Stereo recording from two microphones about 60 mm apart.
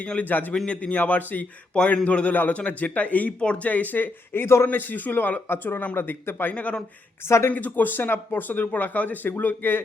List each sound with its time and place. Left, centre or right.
0.0 s speech: left
0.5 s speech: centre
1.7 s speech: centre
7.3 s speech: left
7.5 s speech: left